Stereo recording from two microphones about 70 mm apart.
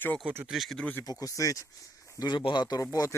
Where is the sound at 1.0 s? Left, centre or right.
Left.